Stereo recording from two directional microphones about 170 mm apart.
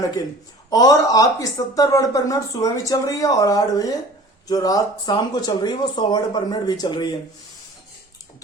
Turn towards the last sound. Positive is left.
turn(degrees=25)  # may be behind; listen again after turning